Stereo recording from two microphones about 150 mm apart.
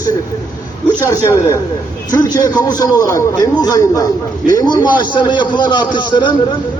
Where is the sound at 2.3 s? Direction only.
25° left (ahead or behind).